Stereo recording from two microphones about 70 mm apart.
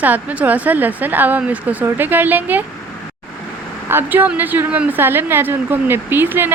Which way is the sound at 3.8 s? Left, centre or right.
Right.